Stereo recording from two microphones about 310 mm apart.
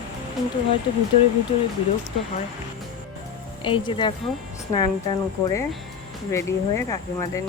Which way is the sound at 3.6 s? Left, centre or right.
Centre.